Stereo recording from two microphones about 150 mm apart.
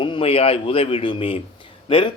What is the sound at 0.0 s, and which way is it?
A man's voice, 35° left (ahead or behind).